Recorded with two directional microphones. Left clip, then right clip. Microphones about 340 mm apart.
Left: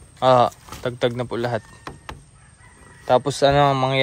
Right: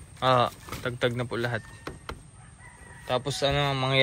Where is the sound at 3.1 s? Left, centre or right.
Left.